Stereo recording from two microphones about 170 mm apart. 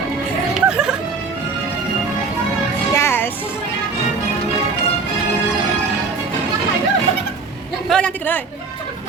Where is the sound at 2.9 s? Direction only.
15° left (ahead or behind).